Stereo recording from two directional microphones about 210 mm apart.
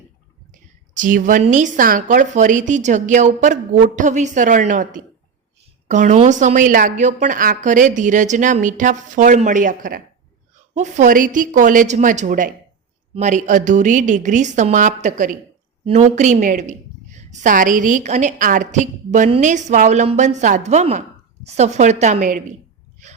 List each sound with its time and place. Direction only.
0.5 s a woman's voice: 40° right (ahead or behind)